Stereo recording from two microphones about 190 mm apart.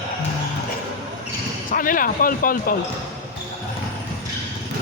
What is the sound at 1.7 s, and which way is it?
Speech, 45° left (ahead or behind).